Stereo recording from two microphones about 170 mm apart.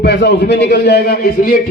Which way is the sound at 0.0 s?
90° left.